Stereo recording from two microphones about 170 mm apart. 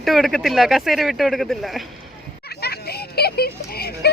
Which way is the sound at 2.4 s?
70° left (ahead or behind).